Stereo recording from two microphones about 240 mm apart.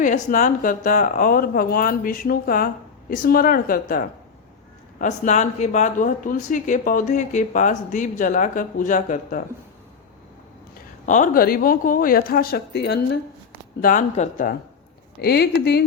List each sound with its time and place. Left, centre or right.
0.0 s speech: left
11.0 s speech: left
13.8 s speech: left